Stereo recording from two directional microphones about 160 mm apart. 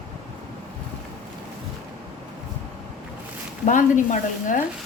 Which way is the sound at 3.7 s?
55° left (ahead or behind).